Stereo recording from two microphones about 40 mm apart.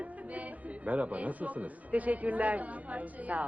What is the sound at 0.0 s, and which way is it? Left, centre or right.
A woman's voice, right.